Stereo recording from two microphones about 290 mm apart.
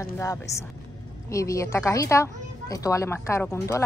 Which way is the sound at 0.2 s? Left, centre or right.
Centre.